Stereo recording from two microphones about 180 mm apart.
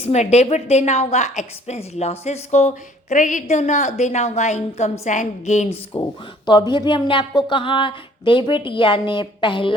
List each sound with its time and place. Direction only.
0.0 s a woman's voice: 40° left (ahead or behind)
5.9 s speech: 25° left (ahead or behind)